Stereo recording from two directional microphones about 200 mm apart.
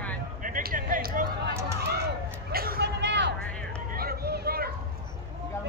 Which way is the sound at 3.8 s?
50° right (ahead or behind).